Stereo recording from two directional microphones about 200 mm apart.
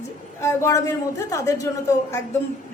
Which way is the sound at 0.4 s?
15° left (ahead or behind).